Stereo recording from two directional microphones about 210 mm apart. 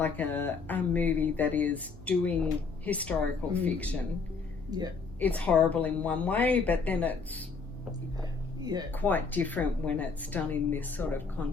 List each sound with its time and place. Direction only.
0.0 s speech: 10° left (ahead or behind)
4.7 s speech: 20° right (ahead or behind)
5.2 s speech: 5° left (ahead or behind)
8.2 s a sound: 20° right (ahead or behind)
8.9 s speech: 10° left (ahead or behind)